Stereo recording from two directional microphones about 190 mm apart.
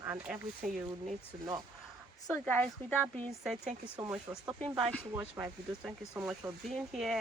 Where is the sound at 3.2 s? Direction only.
Centre (ahead or behind).